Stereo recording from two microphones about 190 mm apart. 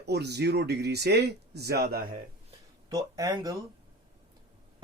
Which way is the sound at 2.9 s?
20° right (ahead or behind).